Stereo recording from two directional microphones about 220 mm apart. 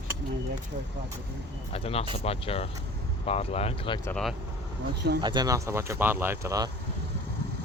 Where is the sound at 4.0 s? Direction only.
5° left (ahead or behind).